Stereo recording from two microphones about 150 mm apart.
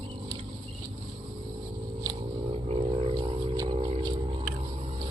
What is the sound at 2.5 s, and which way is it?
Vehicle, 40° right (ahead or behind).